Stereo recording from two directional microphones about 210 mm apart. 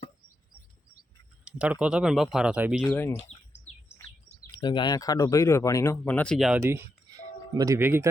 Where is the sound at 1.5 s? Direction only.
5° right (ahead or behind).